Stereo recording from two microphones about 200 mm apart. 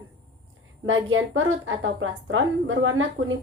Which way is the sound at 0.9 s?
80° right.